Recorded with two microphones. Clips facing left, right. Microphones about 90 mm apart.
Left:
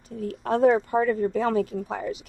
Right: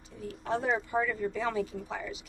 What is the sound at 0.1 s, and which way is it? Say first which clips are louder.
Speech: left 7 dB; 50° left (ahead or behind).